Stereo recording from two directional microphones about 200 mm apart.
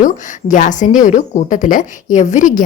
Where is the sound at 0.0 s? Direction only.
40° left (ahead or behind).